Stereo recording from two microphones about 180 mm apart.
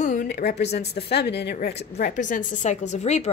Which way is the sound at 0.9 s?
65° left (ahead or behind).